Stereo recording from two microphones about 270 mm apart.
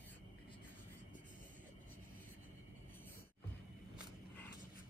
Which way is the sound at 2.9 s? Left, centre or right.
Centre.